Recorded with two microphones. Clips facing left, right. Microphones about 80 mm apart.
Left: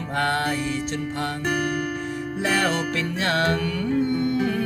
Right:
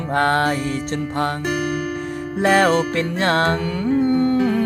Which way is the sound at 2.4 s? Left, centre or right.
Right.